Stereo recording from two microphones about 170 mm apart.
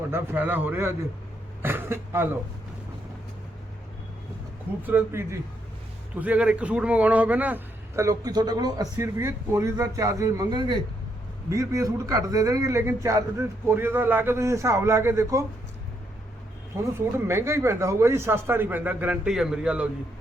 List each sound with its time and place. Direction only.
0.1 s a man's voice: 10° right (ahead or behind)
4.8 s a man's voice: 10° right (ahead or behind)
16.7 s a man's voice: 15° right (ahead or behind)